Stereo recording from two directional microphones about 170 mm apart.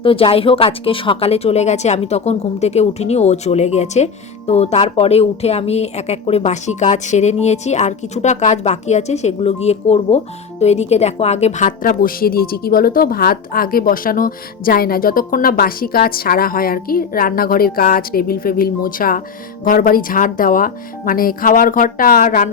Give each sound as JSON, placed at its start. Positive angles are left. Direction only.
{"t": 0.0, "sound": "a woman's voice", "side_deg": 30}